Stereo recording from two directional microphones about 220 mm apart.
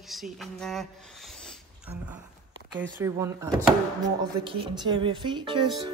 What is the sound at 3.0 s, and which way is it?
Speech, 15° right (ahead or behind).